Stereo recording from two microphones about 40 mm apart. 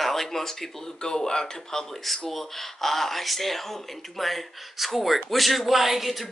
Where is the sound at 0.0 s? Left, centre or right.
Centre.